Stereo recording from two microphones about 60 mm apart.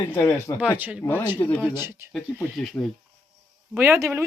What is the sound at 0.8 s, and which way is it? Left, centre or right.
Speech, right.